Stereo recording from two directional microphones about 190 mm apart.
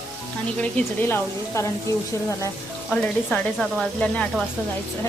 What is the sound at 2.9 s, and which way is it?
Speech, 5° left (ahead or behind).